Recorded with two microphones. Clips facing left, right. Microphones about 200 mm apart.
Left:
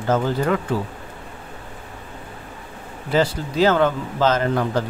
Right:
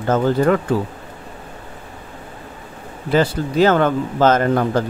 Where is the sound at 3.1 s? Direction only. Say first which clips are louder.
Right 3 dB; 55° right (ahead or behind).